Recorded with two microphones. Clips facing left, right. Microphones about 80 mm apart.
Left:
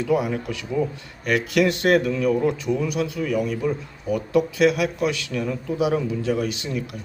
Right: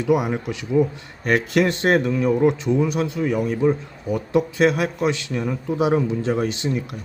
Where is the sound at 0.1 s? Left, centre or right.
Right.